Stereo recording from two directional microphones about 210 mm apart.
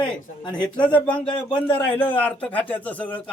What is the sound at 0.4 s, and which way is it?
Speech, 20° left (ahead or behind).